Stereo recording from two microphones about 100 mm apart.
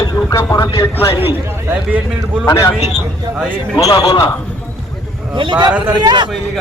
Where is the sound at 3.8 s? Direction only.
35° left (ahead or behind).